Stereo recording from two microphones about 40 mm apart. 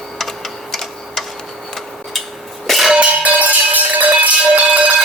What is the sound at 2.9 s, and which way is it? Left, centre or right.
Music, right.